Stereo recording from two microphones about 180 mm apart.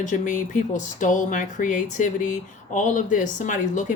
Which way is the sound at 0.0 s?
45° left (ahead or behind).